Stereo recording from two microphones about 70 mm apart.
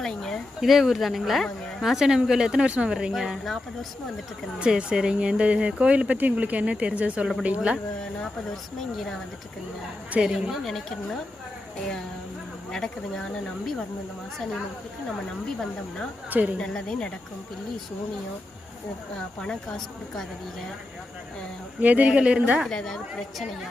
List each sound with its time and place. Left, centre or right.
0.0 s speech: centre
4.6 s speech: centre
10.1 s speech: right
10.6 s speech: centre
12.7 s a woman's voice: centre
16.6 s a woman's voice: centre
19.4 s a woman's voice: centre
21.8 s speech: right
22.6 s a woman's voice: centre